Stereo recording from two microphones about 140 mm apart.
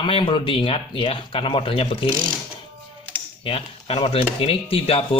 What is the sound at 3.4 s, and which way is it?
Speech, 45° left (ahead or behind).